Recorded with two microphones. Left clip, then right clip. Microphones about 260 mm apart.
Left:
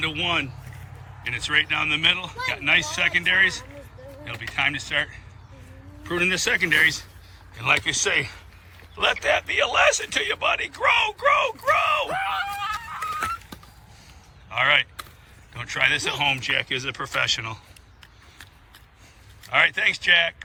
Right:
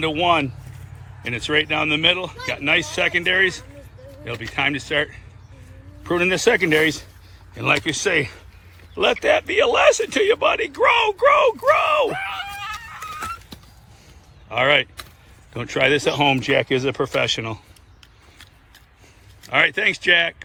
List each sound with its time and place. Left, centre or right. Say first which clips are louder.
0.0 s speech: right 6 dB; centre
12.0 s screaming: right 1 dB; centre
13.1 s fowl: left 2 dB; centre
14.5 s speech: right 3 dB; centre
19.5 s speech: right 2 dB; centre